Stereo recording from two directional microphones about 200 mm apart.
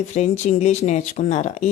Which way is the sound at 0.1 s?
35° left (ahead or behind).